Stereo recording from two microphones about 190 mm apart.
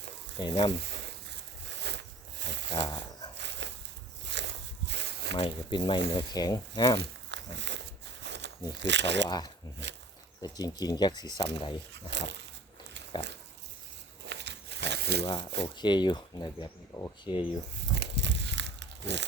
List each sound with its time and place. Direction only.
0.3 s speech: 25° left (ahead or behind)
1.9 s a sound: 65° right (ahead or behind)
2.8 s dog: 20° left (ahead or behind)
3.3 s dog: 65° right (ahead or behind)
4.3 s walk: 65° right (ahead or behind)
5.4 s speech: 25° left (ahead or behind)
7.3 s a sound: 65° right (ahead or behind)
8.8 s speech: 65° right (ahead or behind)
10.4 s speech: 20° left (ahead or behind)
12.1 s speech: 70° right (ahead or behind)
13.1 s speech: 20° left (ahead or behind)
14.3 s crumpling: 65° right (ahead or behind)
15.2 s speech: 20° left (ahead or behind)
17.9 s a sound: 65° right (ahead or behind)